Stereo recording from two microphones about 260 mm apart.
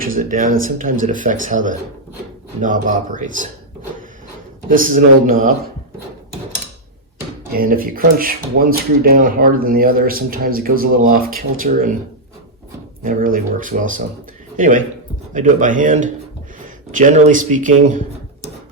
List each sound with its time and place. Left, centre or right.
0.0 s speech: right
4.7 s speech: right
7.5 s speech: right
13.0 s a man's voice: right